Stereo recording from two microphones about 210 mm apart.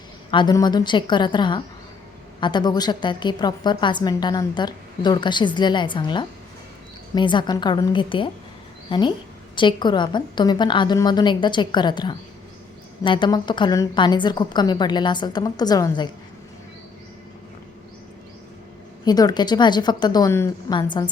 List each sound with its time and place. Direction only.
0.3 s a woman's voice: 20° left (ahead or behind)
19.0 s a woman's voice: 20° left (ahead or behind)